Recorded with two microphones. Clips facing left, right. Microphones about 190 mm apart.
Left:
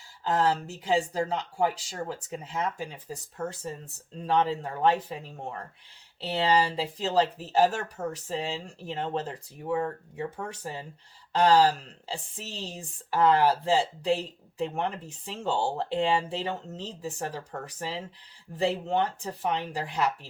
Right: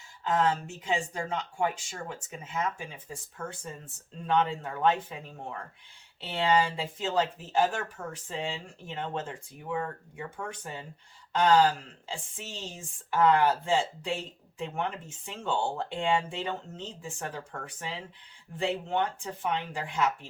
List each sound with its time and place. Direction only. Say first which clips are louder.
0.3 s speech: left 1 dB; 35° left (ahead or behind)
7.0 s speech: left 3 dB; 35° left (ahead or behind)